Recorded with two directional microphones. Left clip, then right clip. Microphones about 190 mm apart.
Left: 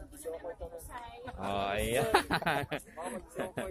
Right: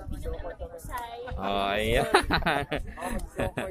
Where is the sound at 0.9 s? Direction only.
Centre (ahead or behind).